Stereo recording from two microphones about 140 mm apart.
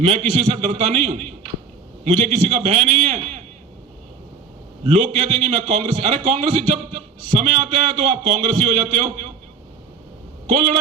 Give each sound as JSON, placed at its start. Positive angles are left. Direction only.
{"t": 0.0, "sound": "a man's voice", "side_deg": -50}
{"t": 4.8, "sound": "a man's voice", "side_deg": -50}
{"t": 10.5, "sound": "a man's voice", "side_deg": -55}